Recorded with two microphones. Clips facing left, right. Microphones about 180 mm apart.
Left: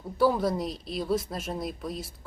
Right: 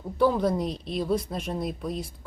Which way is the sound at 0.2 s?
5° left (ahead or behind).